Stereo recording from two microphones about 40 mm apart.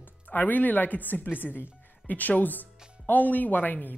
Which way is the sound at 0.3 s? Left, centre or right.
Left.